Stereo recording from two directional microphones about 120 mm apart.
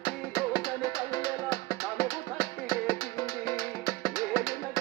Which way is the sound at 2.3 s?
30° left (ahead or behind).